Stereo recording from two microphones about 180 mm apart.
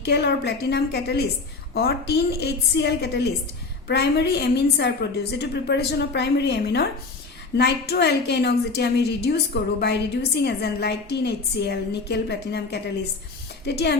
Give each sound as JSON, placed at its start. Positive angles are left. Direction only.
{"t": 0.0, "sound": "a woman's voice", "side_deg": 70}